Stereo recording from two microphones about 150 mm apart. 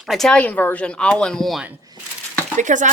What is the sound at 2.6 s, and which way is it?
Speech, 55° right (ahead or behind).